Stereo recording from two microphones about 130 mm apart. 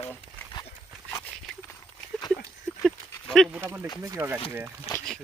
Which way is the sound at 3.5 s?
15° right (ahead or behind).